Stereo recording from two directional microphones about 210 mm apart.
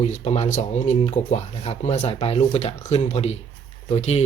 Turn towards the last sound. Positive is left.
turn(degrees=30)  # may be behind; listen again after turning